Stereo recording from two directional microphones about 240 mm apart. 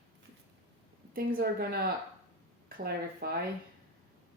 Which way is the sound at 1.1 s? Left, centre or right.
Right.